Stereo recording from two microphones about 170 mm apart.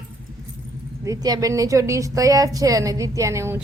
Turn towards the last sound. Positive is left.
turn(degrees=-15)  # may be behind; listen again after turning